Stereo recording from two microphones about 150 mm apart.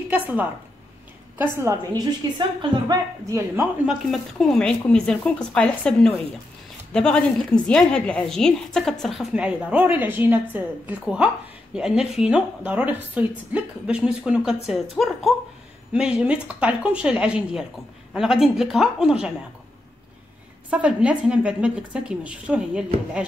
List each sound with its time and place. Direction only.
0.1 s a woman's voice: 10° right (ahead or behind)
3.8 s a woman's voice: centre (ahead or behind)
20.7 s a woman's voice: 10° right (ahead or behind)